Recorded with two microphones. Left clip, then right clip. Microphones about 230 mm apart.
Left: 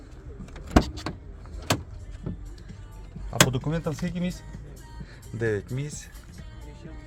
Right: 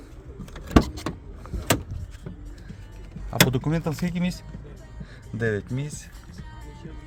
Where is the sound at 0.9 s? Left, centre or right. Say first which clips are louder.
Right 2 dB; centre.